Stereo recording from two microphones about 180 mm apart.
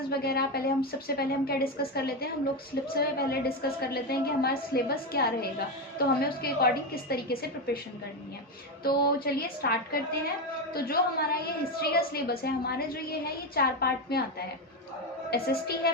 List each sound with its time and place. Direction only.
0.1 s a woman's voice: 60° left (ahead or behind)
8.8 s a woman's voice: 55° left (ahead or behind)